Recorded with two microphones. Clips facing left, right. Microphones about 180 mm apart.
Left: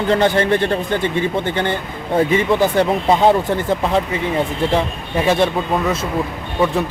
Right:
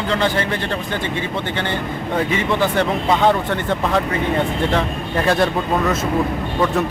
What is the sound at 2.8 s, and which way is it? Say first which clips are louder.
Speech: left 3 dB; 35° left (ahead or behind).